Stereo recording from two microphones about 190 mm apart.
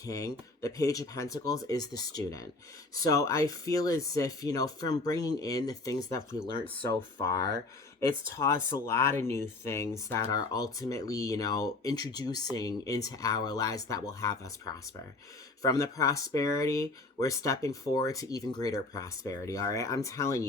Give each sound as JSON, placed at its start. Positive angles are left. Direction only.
{"t": 0.0, "sound": "speech", "side_deg": 20}